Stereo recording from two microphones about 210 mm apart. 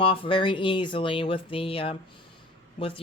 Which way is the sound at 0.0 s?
25° left (ahead or behind).